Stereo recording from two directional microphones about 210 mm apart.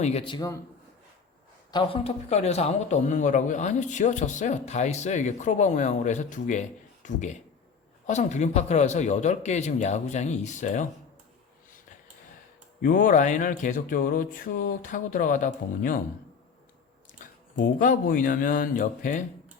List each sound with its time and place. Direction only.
0.0 s a man's voice: 30° left (ahead or behind)
1.7 s a man's voice: 25° left (ahead or behind)
12.8 s a man's voice: 40° left (ahead or behind)
17.7 s a man's voice: 40° left (ahead or behind)